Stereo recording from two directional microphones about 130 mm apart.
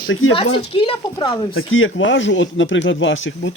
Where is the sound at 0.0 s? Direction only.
45° left (ahead or behind).